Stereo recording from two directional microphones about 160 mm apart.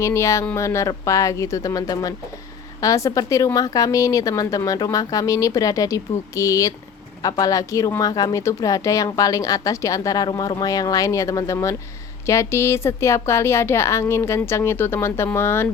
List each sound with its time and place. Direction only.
0.0 s speech: 15° left (ahead or behind)